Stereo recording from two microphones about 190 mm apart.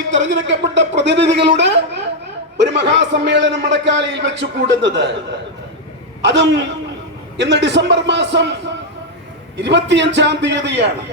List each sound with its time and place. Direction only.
0.1 s a man's voice: 75° right (ahead or behind)
6.2 s a man's voice: 65° right (ahead or behind)